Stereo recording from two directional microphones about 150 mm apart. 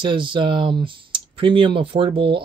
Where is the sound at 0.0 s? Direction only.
35° right (ahead or behind).